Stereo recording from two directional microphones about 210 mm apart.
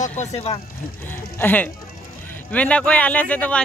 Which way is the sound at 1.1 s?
10° left (ahead or behind).